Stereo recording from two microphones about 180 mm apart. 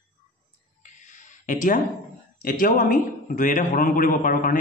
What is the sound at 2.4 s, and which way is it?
A man's voice, 50° left (ahead or behind).